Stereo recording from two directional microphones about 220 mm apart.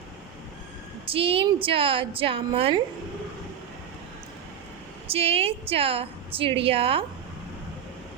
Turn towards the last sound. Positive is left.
turn(degrees=-25)  # may be behind; listen again after turning